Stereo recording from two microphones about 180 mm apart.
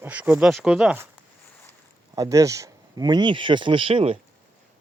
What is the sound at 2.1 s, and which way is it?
Speech, 20° right (ahead or behind).